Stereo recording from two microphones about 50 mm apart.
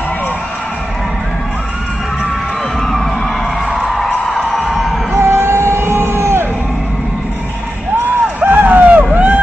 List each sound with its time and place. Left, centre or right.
3.7 s music: centre
5.1 s music: right
8.4 s a sound: right